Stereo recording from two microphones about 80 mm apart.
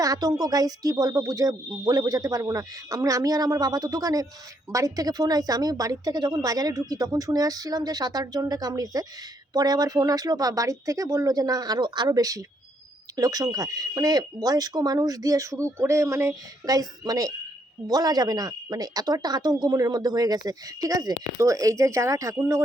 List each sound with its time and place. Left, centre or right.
0.0 s a woman's voice: right
19.9 s a woman's voice: right